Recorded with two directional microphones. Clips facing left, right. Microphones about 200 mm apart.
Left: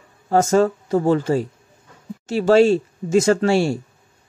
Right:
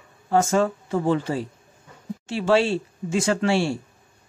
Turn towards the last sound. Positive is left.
turn(degrees=40)  # may be behind; listen again after turning